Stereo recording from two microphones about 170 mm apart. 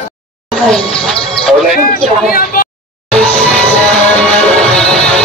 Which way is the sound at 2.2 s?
60° left (ahead or behind).